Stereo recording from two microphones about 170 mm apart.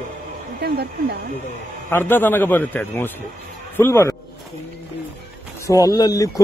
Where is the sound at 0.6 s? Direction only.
70° right (ahead or behind).